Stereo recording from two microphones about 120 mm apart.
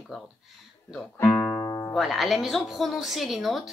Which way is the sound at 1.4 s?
30° left (ahead or behind).